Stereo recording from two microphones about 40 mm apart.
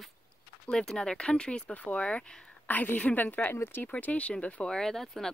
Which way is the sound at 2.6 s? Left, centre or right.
Left.